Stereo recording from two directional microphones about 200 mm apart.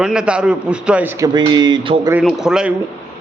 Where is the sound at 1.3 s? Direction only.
20° right (ahead or behind).